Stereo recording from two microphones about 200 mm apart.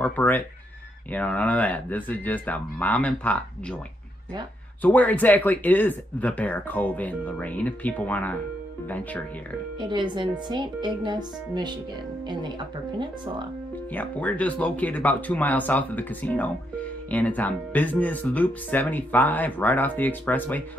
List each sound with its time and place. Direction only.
0.0 s speech: 10° left (ahead or behind)
4.8 s speech: 10° left (ahead or behind)
9.8 s speech: 25° right (ahead or behind)
13.9 s speech: 5° left (ahead or behind)